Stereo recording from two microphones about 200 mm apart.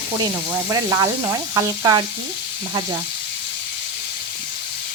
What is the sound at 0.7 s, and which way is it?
Speech, 15° right (ahead or behind).